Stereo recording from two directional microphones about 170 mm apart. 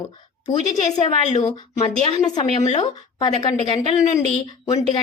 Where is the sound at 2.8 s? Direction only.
25° left (ahead or behind).